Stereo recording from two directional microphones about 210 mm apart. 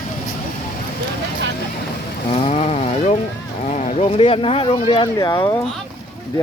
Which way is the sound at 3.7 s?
35° left (ahead or behind).